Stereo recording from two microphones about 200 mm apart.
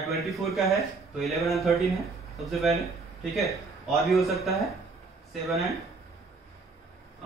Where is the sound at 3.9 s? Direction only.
Centre (ahead or behind).